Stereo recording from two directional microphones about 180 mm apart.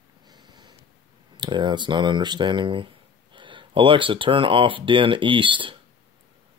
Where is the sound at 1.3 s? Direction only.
25° right (ahead or behind).